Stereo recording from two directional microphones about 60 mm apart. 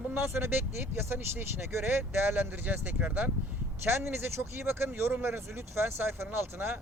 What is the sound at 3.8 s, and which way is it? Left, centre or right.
Speech, right.